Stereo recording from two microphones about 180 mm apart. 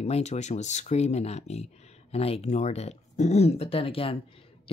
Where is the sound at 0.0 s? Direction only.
40° left (ahead or behind).